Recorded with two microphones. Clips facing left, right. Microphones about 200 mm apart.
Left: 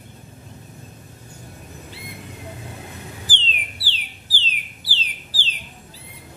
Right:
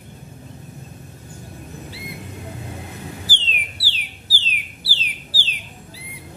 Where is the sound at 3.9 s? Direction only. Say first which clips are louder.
Right 1 dB; 10° right (ahead or behind).